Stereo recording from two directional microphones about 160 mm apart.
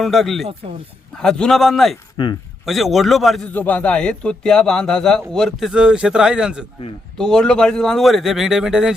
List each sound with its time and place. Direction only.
0.0 s speech: centre (ahead or behind)
2.2 s speech: 30° left (ahead or behind)
2.6 s speech: centre (ahead or behind)
3.5 s speech: 10° left (ahead or behind)